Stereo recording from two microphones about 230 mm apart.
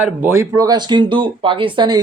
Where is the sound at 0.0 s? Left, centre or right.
Centre.